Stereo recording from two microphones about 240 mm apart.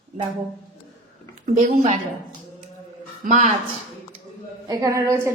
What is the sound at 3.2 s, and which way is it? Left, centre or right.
Speech, right.